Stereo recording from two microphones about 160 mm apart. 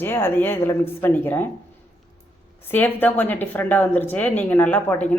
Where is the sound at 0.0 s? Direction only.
15° left (ahead or behind).